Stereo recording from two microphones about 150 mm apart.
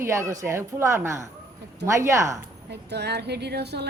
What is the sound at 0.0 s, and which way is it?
Speech, 20° right (ahead or behind).